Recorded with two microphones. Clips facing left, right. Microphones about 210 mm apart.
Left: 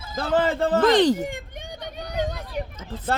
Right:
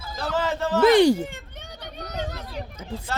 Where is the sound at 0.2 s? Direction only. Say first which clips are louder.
Left 4 dB; 55° left (ahead or behind).